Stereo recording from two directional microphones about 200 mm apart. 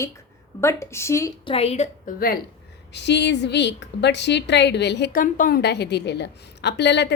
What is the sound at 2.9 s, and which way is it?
A woman's voice, 60° left (ahead or behind).